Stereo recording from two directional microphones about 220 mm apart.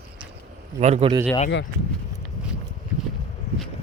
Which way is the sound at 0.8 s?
30° right (ahead or behind).